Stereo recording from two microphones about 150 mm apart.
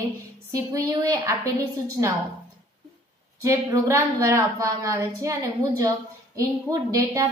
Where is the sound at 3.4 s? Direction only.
20° right (ahead or behind).